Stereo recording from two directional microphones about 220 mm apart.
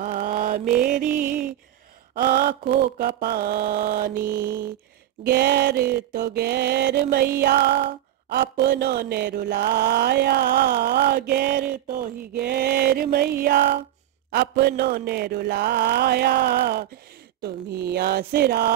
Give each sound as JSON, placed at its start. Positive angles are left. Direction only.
{"t": 0.0, "sound": "mantra", "side_deg": -35}
{"t": 0.7, "sound": "music", "side_deg": -5}
{"t": 2.2, "sound": "mantra", "side_deg": -45}